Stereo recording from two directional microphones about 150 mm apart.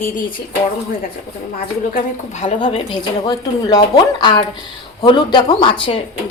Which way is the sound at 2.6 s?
30° left (ahead or behind).